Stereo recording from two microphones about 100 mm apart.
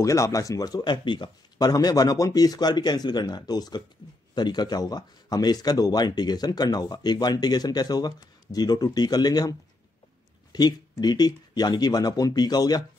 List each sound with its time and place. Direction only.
0.0 s speech: 30° left (ahead or behind)